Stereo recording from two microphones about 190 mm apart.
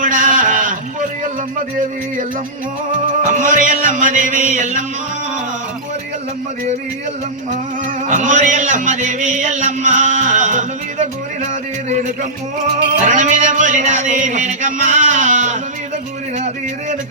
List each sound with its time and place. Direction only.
0.0 s a sound: 45° right (ahead or behind)
3.3 s music: 45° right (ahead or behind)
8.0 s music: 40° right (ahead or behind)
13.1 s music: 40° right (ahead or behind)